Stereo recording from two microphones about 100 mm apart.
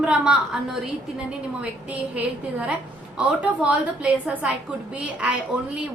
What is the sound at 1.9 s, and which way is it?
A woman's voice, 15° right (ahead or behind).